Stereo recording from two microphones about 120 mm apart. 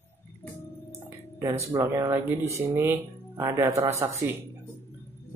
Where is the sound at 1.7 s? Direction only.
25° right (ahead or behind).